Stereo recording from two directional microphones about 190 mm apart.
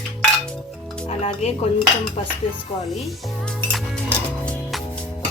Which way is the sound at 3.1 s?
Centre (ahead or behind).